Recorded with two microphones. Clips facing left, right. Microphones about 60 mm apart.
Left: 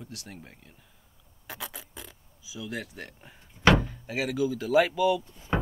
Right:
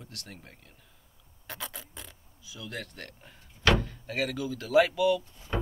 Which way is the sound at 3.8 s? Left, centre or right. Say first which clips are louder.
Even; centre.